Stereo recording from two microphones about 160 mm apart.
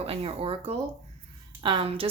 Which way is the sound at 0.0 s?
40° right (ahead or behind).